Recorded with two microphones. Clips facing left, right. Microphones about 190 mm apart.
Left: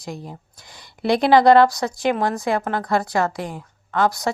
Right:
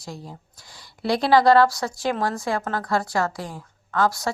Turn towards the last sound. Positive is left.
turn(degrees=20)  # may be behind; listen again after turning